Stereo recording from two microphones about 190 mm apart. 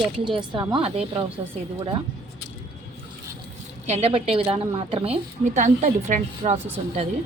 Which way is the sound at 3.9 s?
30° right (ahead or behind).